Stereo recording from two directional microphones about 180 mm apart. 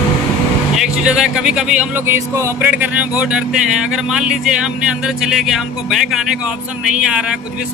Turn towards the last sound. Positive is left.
turn(degrees=0)  # may be behind; listen again after turning